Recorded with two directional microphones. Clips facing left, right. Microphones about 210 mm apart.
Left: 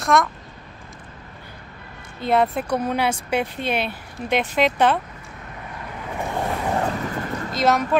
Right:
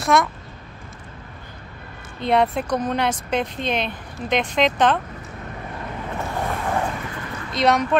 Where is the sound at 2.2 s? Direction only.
Centre (ahead or behind).